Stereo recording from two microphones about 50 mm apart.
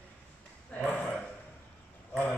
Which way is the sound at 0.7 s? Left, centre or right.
Left.